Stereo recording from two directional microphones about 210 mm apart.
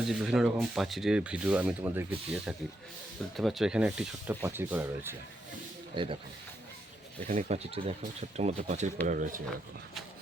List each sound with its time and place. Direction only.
0.0 s speech: centre (ahead or behind)
6.0 s speech: 25° right (ahead or behind)
7.3 s speech: 35° right (ahead or behind)